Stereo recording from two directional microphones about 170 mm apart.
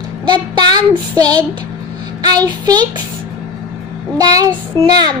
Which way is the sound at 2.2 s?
25° right (ahead or behind).